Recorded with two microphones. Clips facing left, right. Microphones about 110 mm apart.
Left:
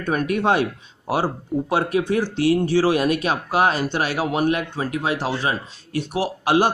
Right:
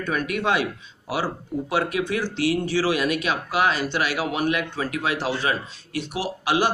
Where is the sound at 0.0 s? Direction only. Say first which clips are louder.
Left 4 dB; 45° left (ahead or behind).